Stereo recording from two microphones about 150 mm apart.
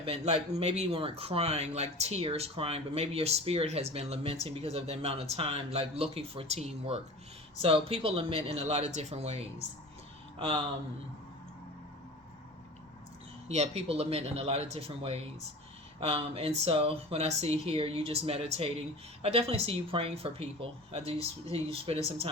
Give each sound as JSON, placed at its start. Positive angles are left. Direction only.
{"t": 0.0, "sound": "speech", "side_deg": -45}
{"t": 10.3, "sound": "speech", "side_deg": -35}
{"t": 13.5, "sound": "speech", "side_deg": -45}